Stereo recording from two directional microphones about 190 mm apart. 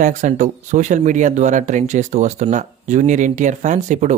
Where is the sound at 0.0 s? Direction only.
40° right (ahead or behind).